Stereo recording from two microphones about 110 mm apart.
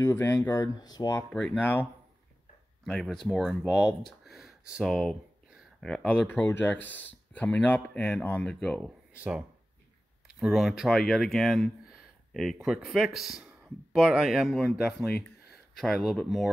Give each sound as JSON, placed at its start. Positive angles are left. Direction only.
{"t": 0.0, "sound": "speech", "side_deg": 25}
{"t": 0.7, "sound": "speech", "side_deg": 35}
{"t": 1.6, "sound": "speech", "side_deg": 15}
{"t": 2.8, "sound": "speech", "side_deg": 5}
{"t": 9.1, "sound": "speech", "side_deg": -10}